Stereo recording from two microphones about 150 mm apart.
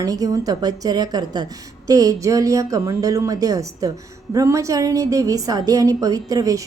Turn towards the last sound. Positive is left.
turn(degrees=-25)  # may be behind; listen again after turning